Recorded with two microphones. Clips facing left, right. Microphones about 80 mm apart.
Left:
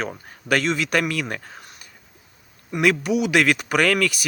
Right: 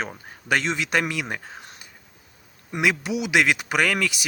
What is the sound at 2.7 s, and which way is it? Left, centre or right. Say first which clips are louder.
Speech: left 4 dB; right.